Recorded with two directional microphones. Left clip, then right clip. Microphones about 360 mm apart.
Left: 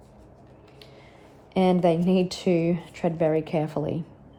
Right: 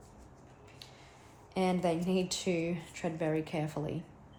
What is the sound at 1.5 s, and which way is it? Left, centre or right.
Speech, left.